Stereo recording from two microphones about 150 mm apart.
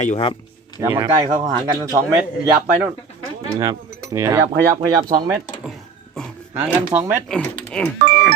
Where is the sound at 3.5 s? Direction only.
20° right (ahead or behind).